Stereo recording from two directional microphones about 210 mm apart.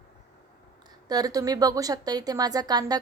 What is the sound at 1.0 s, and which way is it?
A woman's voice, 20° right (ahead or behind).